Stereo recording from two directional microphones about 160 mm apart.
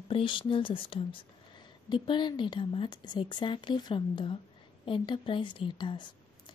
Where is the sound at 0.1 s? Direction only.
30° left (ahead or behind).